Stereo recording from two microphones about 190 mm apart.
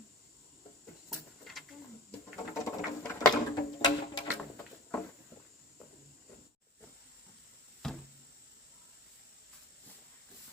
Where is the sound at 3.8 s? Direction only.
20° left (ahead or behind).